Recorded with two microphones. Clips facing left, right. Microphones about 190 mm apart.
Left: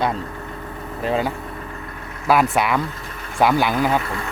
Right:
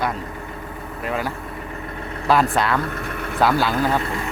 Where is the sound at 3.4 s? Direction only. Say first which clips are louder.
Left 2 dB; 15° left (ahead or behind).